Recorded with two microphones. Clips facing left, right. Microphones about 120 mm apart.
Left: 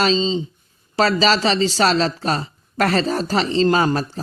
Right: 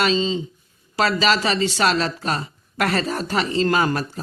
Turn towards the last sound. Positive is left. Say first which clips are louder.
# left 2 dB
turn(degrees=30)  # may be behind; listen again after turning